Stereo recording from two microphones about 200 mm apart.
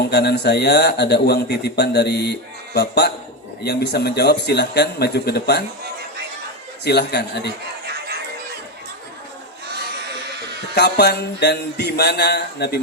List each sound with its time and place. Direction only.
0.1 s a man's voice: 55° left (ahead or behind)
6.8 s a man's voice: 55° left (ahead or behind)
10.8 s a man's voice: 55° left (ahead or behind)